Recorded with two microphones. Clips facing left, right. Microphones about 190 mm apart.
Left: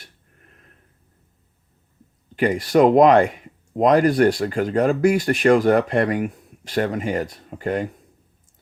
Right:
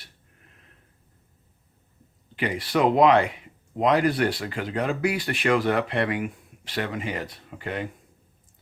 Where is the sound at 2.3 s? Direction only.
45° left (ahead or behind).